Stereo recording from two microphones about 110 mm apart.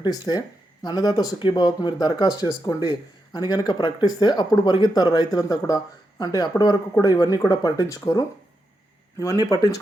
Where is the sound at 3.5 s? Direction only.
40° left (ahead or behind).